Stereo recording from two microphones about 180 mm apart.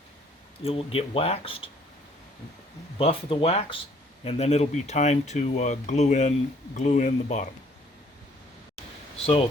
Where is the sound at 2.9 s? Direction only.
30° left (ahead or behind).